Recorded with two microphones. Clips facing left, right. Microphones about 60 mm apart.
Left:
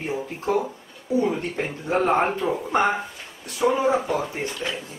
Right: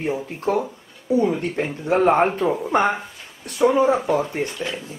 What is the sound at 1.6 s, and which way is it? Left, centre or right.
Speech, right.